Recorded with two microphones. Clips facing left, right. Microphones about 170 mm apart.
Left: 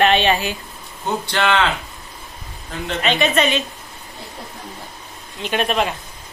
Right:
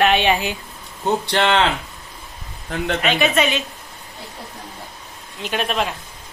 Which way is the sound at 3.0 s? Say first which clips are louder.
Left 2 dB; 5° right (ahead or behind).